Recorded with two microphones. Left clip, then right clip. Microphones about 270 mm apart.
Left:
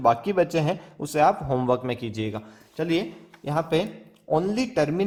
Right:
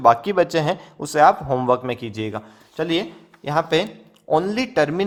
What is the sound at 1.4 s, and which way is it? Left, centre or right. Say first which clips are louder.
A man's voice: right 4 dB; right.